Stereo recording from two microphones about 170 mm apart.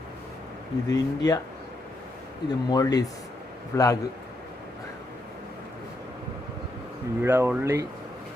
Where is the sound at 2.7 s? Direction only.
20° left (ahead or behind).